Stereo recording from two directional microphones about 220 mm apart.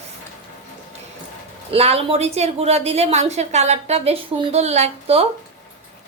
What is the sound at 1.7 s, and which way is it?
Speech, 25° right (ahead or behind).